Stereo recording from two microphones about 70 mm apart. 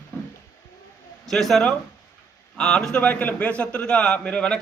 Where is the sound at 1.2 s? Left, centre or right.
Centre.